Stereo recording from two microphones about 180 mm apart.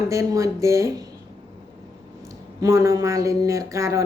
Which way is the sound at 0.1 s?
15° right (ahead or behind).